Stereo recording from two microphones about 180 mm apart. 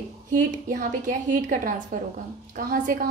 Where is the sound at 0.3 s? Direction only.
50° right (ahead or behind).